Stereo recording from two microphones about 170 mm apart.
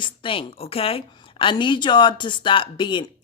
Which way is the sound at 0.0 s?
30° left (ahead or behind).